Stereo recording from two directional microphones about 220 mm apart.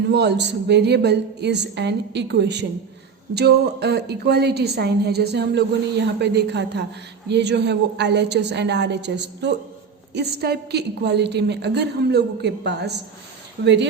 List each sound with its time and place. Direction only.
0.1 s a woman's voice: 50° right (ahead or behind)